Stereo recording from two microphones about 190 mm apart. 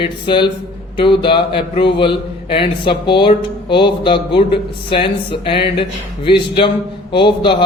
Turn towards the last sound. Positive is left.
turn(degrees=25)  # may be behind; listen again after turning